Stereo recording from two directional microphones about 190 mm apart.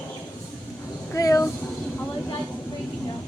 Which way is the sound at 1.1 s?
15° left (ahead or behind).